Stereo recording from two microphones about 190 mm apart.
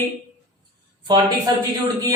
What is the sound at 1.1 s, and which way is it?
Speech, 20° right (ahead or behind).